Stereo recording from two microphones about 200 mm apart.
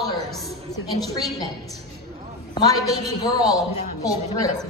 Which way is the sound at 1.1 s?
20° left (ahead or behind).